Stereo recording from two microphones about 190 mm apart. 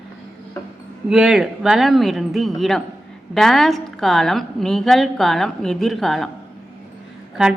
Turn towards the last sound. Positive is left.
turn(degrees=-5)  # may be behind; listen again after turning